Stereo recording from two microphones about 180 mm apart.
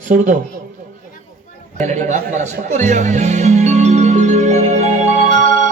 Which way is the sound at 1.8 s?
45° right (ahead or behind).